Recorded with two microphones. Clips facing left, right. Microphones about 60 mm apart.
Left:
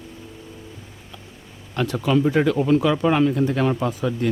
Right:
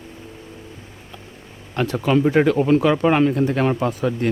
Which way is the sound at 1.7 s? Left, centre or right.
Right.